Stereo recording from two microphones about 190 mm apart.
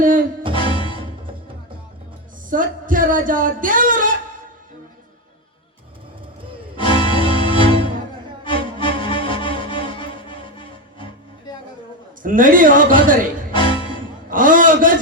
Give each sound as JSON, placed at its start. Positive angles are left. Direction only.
{"t": 0.5, "sound": "music", "side_deg": 25}
{"t": 2.5, "sound": "speech", "side_deg": -45}
{"t": 6.7, "sound": "music", "side_deg": 25}
{"t": 12.2, "sound": "speech", "side_deg": -45}
{"t": 13.5, "sound": "music", "side_deg": 25}
{"t": 14.3, "sound": "speech", "side_deg": -45}